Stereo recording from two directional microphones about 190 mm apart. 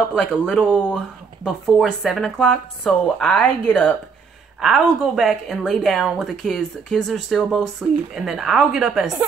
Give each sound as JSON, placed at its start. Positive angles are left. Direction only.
{"t": 0.1, "sound": "speech", "side_deg": 5}